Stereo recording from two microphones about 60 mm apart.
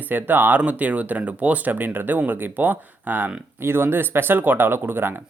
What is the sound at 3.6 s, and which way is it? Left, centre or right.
Speech, right.